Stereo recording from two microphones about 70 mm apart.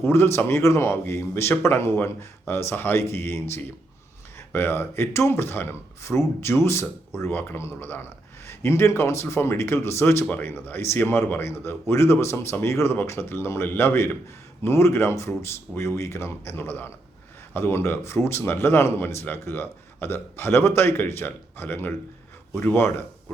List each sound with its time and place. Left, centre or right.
0.0 s speech: left